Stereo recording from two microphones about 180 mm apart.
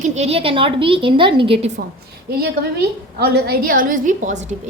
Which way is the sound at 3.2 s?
60° right (ahead or behind).